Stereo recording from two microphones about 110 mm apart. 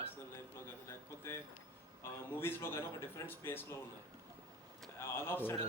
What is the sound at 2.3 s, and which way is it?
Speech, 20° left (ahead or behind).